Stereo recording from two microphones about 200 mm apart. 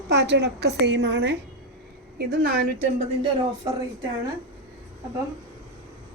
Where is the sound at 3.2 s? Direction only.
15° right (ahead or behind).